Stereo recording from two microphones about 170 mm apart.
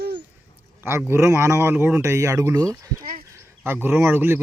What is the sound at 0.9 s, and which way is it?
A man's voice, 15° right (ahead or behind).